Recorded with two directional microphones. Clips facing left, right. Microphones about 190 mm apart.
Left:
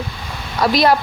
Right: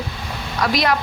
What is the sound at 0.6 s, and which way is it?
Speech, 30° left (ahead or behind).